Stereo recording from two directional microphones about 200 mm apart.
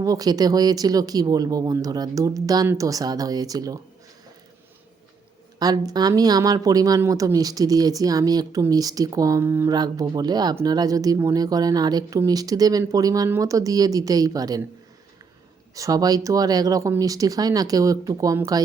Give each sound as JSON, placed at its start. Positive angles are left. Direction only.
{"t": 0.0, "sound": "speech", "side_deg": -20}
{"t": 5.5, "sound": "speech", "side_deg": -20}
{"t": 15.7, "sound": "speech", "side_deg": -15}